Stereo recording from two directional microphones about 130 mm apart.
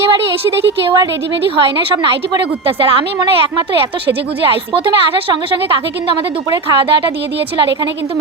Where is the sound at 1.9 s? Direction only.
40° right (ahead or behind).